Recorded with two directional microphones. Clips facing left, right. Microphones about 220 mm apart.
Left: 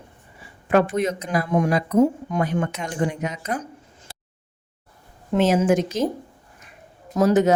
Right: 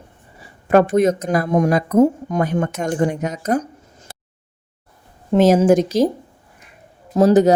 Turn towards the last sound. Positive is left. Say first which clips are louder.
# right 5 dB
turn(degrees=-35)  # may be behind; listen again after turning